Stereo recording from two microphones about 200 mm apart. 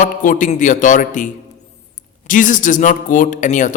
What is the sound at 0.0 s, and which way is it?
A man's voice, 40° left (ahead or behind).